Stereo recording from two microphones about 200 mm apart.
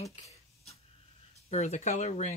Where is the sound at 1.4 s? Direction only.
35° left (ahead or behind).